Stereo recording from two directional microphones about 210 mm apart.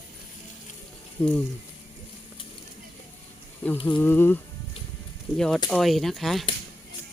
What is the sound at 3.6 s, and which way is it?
Music, 5° left (ahead or behind).